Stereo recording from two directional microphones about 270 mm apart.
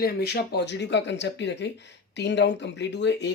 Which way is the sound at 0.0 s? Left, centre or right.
Left.